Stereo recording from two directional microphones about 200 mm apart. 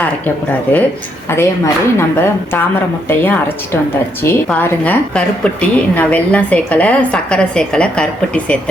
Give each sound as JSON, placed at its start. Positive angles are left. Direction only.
{"t": 1.3, "sound": "a woman's voice", "side_deg": 10}